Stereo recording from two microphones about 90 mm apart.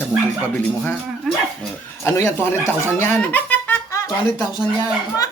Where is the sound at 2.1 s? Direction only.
30° left (ahead or behind).